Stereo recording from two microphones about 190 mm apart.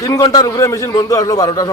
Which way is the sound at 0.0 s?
20° left (ahead or behind).